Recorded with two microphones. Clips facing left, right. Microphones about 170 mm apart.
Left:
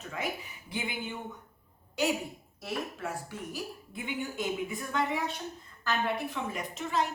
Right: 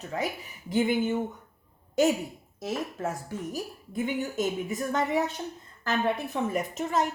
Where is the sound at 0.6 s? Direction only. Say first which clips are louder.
Right 12 dB; 45° right (ahead or behind).